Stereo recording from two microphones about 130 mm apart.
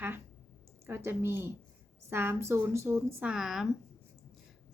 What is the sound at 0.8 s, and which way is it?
A woman's voice, 20° right (ahead or behind).